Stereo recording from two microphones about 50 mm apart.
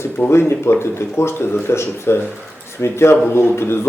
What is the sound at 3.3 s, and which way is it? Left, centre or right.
Speech, left.